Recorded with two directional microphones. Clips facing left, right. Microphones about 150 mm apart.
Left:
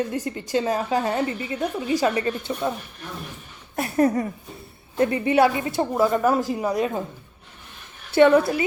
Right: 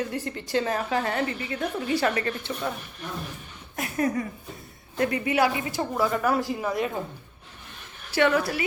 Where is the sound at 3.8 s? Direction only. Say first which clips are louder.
Left 6 dB; 35° left (ahead or behind).